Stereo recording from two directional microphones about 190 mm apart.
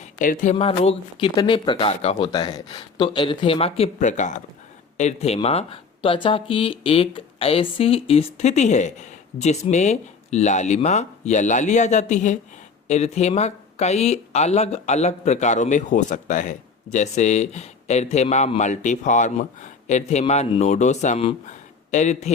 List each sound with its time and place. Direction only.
0.2 s speech: 45° left (ahead or behind)
0.8 s speech: 30° left (ahead or behind)
2.3 s speech: 20° left (ahead or behind); by 22.3 s 40° left (ahead or behind)